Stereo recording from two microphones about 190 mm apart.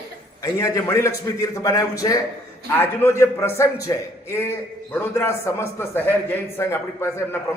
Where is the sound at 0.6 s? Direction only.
15° left (ahead or behind).